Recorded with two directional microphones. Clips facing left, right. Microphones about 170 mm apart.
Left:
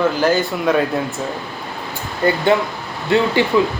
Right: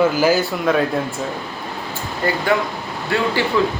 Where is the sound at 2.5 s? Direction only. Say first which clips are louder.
Left 2 dB; 25° left (ahead or behind).